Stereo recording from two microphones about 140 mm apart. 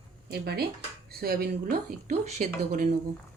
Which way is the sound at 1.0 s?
90° right.